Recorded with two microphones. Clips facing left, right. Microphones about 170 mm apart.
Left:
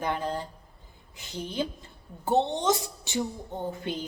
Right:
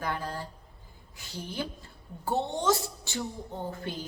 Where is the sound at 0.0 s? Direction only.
20° left (ahead or behind).